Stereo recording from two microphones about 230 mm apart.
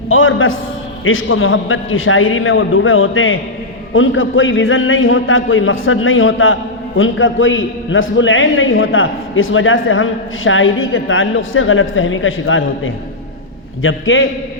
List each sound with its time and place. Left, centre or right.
0.1 s a man's voice: left